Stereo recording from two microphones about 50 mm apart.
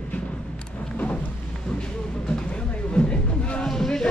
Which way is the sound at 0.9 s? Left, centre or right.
Left.